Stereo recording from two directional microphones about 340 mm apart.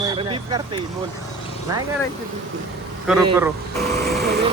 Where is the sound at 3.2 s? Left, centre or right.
Centre.